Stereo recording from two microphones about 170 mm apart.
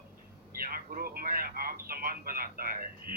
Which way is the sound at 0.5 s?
60° right (ahead or behind).